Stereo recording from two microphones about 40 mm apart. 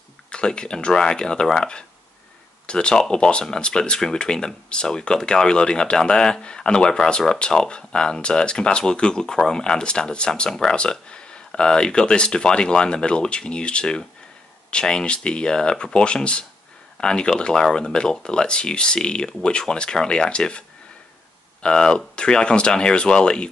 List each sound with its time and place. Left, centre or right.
0.3 s speech: left
21.6 s speech: left